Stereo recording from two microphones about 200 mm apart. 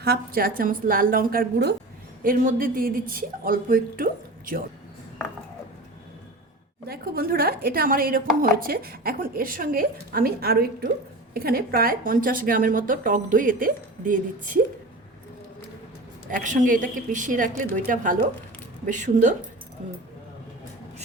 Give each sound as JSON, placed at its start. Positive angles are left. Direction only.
{"t": 0.0, "sound": "speech", "side_deg": -50}
{"t": 6.8, "sound": "speech", "side_deg": -50}
{"t": 16.3, "sound": "a woman's voice", "side_deg": -40}